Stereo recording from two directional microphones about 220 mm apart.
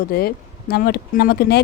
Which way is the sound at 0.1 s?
45° left (ahead or behind).